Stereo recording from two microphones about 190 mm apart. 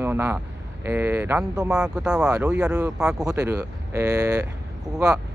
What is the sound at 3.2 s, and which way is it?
Speech, 15° right (ahead or behind).